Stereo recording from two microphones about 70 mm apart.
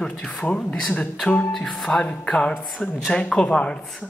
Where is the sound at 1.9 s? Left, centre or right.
Left.